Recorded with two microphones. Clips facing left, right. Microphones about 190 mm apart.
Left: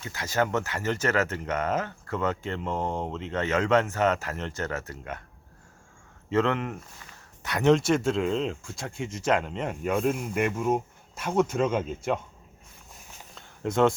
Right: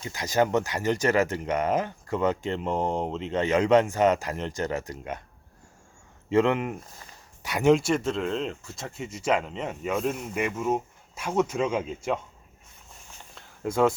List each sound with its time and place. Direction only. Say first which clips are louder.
0.0 s speech: right 3 dB; 15° right (ahead or behind)
6.3 s speech: right 3 dB; 15° right (ahead or behind)
7.9 s speech: left 2 dB; centre (ahead or behind)
13.3 s a sound: even; 5° right (ahead or behind)